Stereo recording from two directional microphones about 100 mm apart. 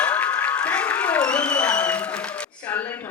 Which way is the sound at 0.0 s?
15° left (ahead or behind).